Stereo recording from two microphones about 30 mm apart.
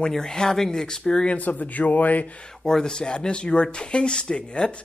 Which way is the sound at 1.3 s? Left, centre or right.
Left.